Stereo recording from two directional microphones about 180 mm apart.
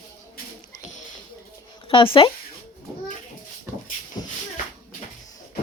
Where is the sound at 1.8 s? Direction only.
30° left (ahead or behind).